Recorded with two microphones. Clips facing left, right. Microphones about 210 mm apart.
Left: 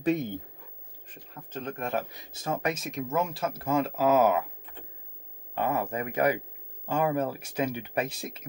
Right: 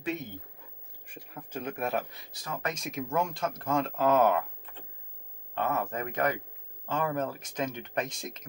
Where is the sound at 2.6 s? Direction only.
Centre (ahead or behind).